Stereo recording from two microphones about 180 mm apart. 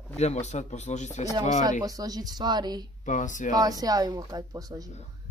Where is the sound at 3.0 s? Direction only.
45° left (ahead or behind).